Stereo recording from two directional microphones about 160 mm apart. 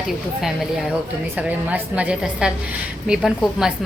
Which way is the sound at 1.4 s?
10° right (ahead or behind).